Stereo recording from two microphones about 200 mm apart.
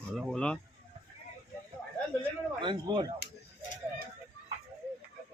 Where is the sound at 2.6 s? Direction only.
25° right (ahead or behind).